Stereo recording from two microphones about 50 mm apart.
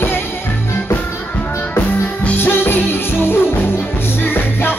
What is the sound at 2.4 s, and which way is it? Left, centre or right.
Music, left.